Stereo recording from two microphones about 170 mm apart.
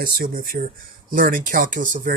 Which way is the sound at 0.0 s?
60° right (ahead or behind).